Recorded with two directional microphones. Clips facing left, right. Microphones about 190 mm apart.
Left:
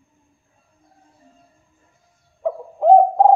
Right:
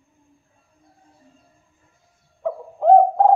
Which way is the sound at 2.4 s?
15° left (ahead or behind).